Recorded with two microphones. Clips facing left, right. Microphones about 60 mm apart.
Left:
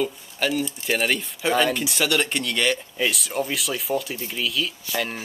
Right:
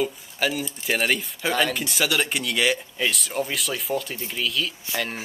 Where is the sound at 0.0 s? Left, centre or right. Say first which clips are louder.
Even; centre.